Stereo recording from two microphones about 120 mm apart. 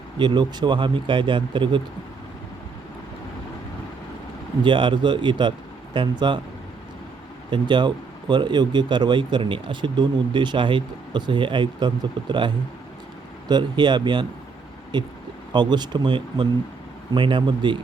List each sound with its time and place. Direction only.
0.2 s speech: 40° right (ahead or behind)
4.6 s speech: 40° right (ahead or behind)
7.5 s speech: 40° right (ahead or behind)
13.5 s speech: 40° right (ahead or behind)